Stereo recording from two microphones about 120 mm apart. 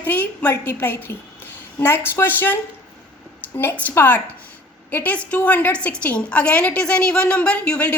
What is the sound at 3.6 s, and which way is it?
A woman's voice, 15° left (ahead or behind).